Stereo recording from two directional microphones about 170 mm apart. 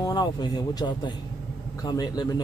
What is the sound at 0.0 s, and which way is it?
A man's voice, 25° left (ahead or behind).